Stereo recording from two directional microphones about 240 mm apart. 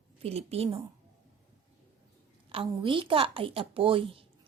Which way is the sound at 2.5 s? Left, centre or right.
Right.